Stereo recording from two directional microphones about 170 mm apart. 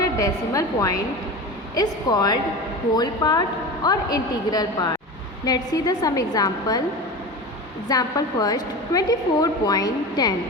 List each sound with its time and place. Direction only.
0.0 s a woman's voice: 20° left (ahead or behind)
7.9 s a woman's voice: 20° left (ahead or behind)